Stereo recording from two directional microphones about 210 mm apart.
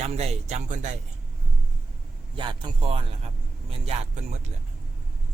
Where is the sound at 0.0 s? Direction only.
30° right (ahead or behind).